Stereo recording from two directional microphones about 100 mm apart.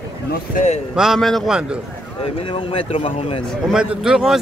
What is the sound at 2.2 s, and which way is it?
A man's voice, 65° left (ahead or behind).